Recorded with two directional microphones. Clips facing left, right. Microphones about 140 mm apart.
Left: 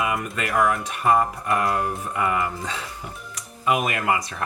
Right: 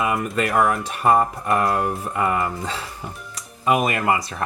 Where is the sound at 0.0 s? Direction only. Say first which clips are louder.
Right 4 dB; 30° right (ahead or behind).